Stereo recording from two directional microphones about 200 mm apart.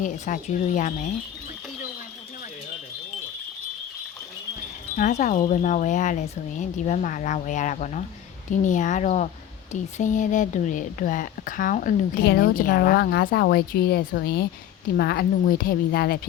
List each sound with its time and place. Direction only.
0.0 s speech: 40° left (ahead or behind)
4.9 s speech: 40° left (ahead or behind)